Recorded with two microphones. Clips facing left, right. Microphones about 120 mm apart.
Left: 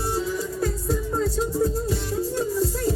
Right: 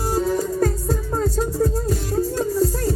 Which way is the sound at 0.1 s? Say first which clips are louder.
Right 8 dB; 45° right (ahead or behind).